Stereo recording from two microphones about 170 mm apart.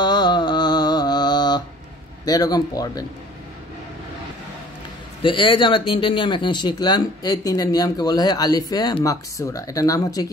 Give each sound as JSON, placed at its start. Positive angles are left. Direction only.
{"t": 0.0, "sound": "mantra", "side_deg": 25}
{"t": 2.2, "sound": "speech", "side_deg": 20}
{"t": 5.2, "sound": "speech", "side_deg": 30}